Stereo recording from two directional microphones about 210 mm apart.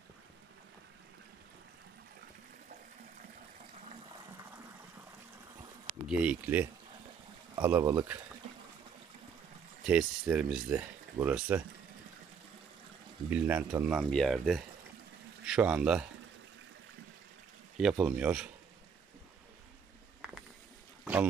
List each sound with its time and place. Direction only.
6.0 s speech: 5° right (ahead or behind)
9.8 s speech: 5° right (ahead or behind)
13.3 s speech: 5° right (ahead or behind)
17.7 s speech: 5° right (ahead or behind)
20.2 s a sound: 5° right (ahead or behind)